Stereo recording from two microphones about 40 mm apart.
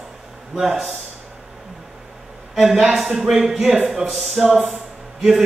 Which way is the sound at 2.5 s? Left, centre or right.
Centre.